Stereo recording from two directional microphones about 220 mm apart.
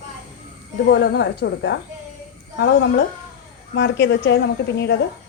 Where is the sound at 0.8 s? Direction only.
50° left (ahead or behind).